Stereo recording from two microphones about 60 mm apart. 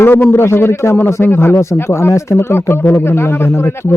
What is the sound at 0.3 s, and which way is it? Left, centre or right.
A man's voice, left.